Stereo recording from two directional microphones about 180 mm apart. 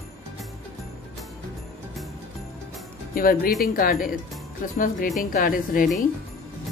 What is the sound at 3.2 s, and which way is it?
Speech, 55° left (ahead or behind).